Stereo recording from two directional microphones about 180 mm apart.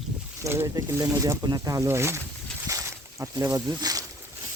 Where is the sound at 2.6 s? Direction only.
15° right (ahead or behind).